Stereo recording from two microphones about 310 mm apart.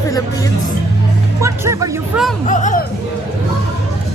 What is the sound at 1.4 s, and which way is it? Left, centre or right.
Speech, centre.